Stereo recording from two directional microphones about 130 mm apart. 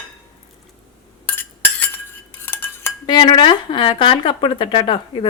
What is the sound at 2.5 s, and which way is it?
Cutlery, 15° left (ahead or behind).